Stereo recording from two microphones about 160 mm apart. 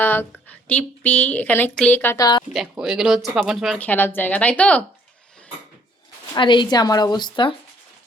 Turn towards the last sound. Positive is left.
turn(degrees=30)  # may be behind; listen again after turning